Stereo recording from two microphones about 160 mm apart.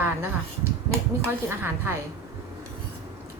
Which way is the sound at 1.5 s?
15° right (ahead or behind).